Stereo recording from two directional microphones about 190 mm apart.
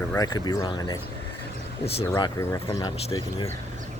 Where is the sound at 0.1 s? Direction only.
20° left (ahead or behind).